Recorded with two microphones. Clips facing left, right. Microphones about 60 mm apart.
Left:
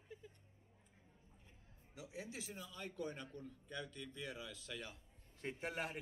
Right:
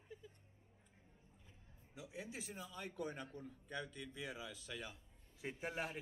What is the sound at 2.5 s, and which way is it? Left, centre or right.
A man's voice, centre.